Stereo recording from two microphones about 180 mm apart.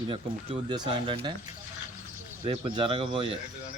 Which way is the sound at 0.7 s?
25° right (ahead or behind).